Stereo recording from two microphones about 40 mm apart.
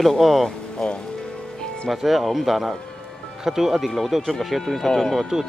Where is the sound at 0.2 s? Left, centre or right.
Centre.